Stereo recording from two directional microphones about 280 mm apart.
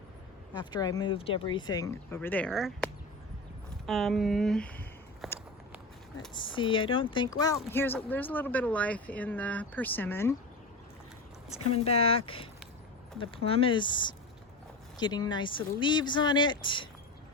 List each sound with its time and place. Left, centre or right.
0.5 s speech: centre
6.3 s speech: centre
11.4 s speech: left